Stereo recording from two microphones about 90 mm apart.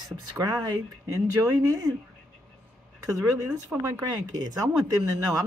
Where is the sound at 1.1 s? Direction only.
40° right (ahead or behind).